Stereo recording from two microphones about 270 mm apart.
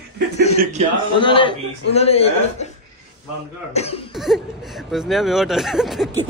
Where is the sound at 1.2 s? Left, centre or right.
Centre.